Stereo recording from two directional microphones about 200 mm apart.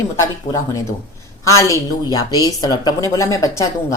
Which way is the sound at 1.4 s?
15° left (ahead or behind).